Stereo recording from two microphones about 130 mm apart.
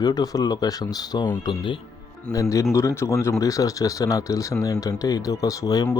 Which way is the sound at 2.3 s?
25° left (ahead or behind).